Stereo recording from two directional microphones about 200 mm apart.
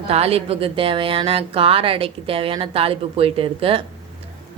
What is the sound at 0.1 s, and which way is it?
Speech, 30° right (ahead or behind).